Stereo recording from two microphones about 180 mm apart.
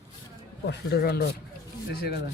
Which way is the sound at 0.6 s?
65° left (ahead or behind).